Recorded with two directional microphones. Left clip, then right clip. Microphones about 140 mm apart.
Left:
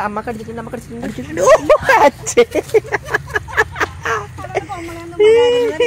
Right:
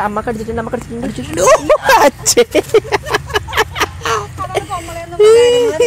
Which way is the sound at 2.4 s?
55° right (ahead or behind).